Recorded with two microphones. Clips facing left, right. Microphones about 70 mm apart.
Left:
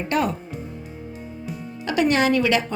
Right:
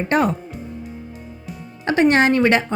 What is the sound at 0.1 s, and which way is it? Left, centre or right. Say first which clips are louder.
Speech: right 4 dB; right.